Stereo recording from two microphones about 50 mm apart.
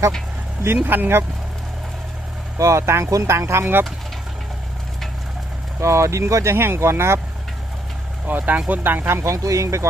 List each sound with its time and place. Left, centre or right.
0.9 s speech: right
2.6 s speech: right
5.8 s speech: right
6.7 s speech: right
8.3 s speech: right
9.2 s speech: right